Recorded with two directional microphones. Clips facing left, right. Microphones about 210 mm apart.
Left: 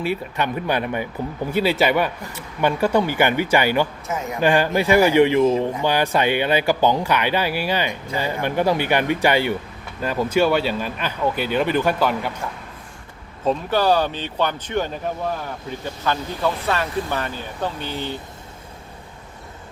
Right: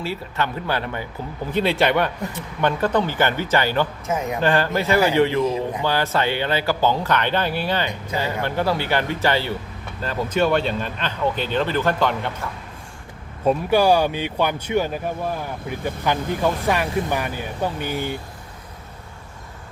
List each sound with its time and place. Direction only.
0.0 s speech: 15° left (ahead or behind)
1.5 s a man's voice: 5° left (ahead or behind)
13.4 s speech: 10° right (ahead or behind)